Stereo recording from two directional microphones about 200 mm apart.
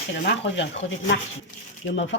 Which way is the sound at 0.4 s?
65° left (ahead or behind).